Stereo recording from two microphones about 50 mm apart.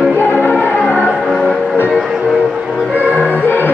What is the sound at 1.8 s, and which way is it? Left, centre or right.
Music, centre.